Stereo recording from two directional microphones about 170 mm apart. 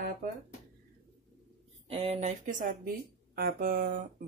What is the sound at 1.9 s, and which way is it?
Speech, 35° right (ahead or behind).